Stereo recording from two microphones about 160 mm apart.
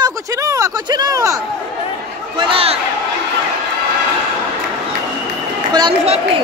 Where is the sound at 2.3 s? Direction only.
35° right (ahead or behind).